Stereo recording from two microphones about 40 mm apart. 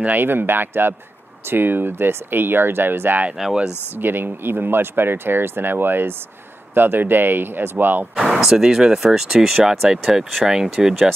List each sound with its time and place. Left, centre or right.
0.2 s speech: right
8.2 s speech: centre